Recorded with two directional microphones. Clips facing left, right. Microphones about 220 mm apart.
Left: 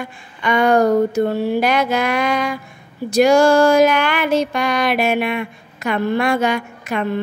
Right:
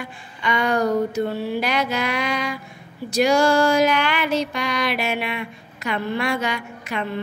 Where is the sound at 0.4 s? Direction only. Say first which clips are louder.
Left 7 dB; 50° left (ahead or behind).